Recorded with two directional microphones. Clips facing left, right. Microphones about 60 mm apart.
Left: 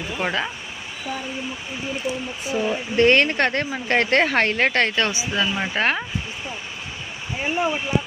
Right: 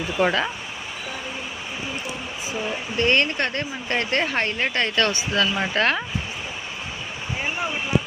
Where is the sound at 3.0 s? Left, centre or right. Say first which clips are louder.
Left 4 dB; left.